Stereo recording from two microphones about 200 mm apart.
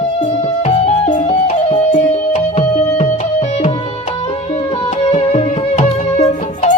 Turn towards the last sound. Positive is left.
turn(degrees=30)  # may be behind; listen again after turning